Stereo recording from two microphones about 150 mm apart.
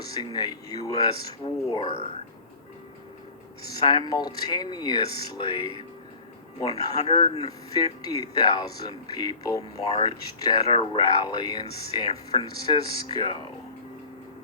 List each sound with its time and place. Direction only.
0.0 s speech: 25° left (ahead or behind)
3.7 s speech: 30° left (ahead or behind)
7.1 s speech: 40° left (ahead or behind)
7.7 s speech: 25° left (ahead or behind)